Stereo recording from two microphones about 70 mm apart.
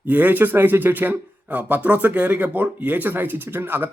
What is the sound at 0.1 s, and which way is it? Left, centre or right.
Speech, right.